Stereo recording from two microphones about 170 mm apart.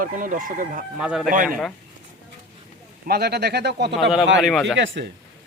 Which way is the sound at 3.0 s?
70° right (ahead or behind).